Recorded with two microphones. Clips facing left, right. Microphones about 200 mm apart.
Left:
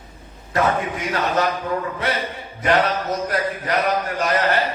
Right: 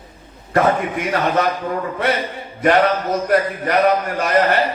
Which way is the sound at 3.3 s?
55° right (ahead or behind).